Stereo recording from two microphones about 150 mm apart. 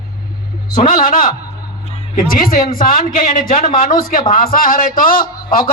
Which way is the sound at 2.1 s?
70° left (ahead or behind).